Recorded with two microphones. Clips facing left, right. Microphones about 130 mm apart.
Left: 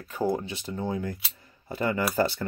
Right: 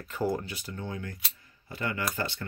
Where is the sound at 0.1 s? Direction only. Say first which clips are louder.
Left 3 dB; 15° left (ahead or behind).